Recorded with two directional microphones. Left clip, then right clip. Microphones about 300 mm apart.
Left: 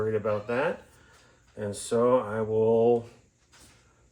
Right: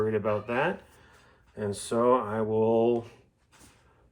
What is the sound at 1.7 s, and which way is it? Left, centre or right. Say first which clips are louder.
Speech: left 1 dB; right.